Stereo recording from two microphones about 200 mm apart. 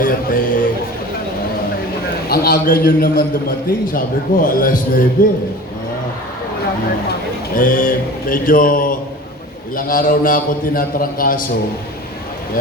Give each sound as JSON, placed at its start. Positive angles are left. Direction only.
{"t": 0.0, "sound": "a man's voice", "side_deg": 45}
{"t": 2.3, "sound": "a man's voice", "side_deg": 45}
{"t": 7.5, "sound": "a man's voice", "side_deg": 45}